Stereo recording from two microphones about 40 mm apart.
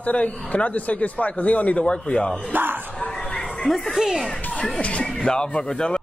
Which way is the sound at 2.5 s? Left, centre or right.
Right.